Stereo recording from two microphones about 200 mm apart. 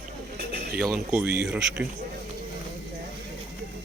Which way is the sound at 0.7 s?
5° right (ahead or behind).